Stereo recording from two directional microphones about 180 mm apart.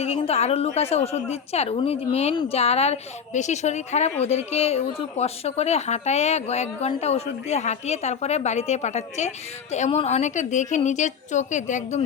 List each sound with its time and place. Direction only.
0.0 s a woman's voice: 35° left (ahead or behind)